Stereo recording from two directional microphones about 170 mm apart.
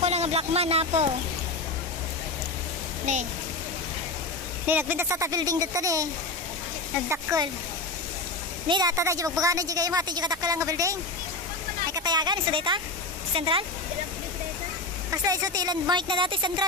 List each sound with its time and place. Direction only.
0.0 s speech: 40° right (ahead or behind)
3.1 s speech: 45° right (ahead or behind)
4.6 s speech: 10° right (ahead or behind)
7.1 s speech: 20° right (ahead or behind)
8.6 s speech: 25° right (ahead or behind)
15.0 s speech: 20° right (ahead or behind)